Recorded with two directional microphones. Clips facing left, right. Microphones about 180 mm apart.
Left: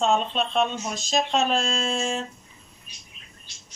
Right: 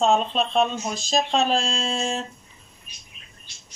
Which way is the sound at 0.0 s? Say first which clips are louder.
Right 2 dB; 35° right (ahead or behind).